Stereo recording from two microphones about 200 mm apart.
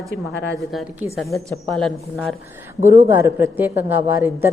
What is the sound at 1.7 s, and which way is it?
Speech, 5° left (ahead or behind).